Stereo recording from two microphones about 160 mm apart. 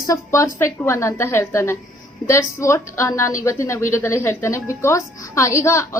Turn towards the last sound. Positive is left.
turn(degrees=20)  # may be behind; listen again after turning